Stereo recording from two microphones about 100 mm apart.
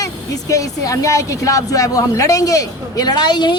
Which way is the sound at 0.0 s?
35° left (ahead or behind).